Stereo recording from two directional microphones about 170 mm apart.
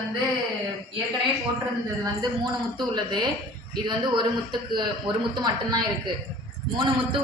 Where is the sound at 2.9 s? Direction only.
25° right (ahead or behind).